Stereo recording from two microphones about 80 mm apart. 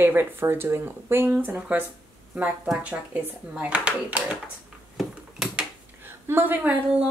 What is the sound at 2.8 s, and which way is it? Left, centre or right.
Speech, centre.